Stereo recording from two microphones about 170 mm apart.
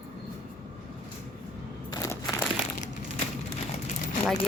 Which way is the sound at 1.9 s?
20° left (ahead or behind).